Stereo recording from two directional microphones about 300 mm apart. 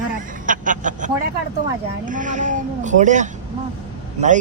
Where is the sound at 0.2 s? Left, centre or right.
Right.